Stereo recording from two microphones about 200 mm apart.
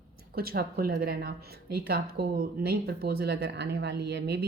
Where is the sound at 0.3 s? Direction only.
50° right (ahead or behind).